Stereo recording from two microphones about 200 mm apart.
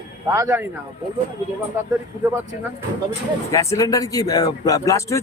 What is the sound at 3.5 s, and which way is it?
Speech, 15° left (ahead or behind).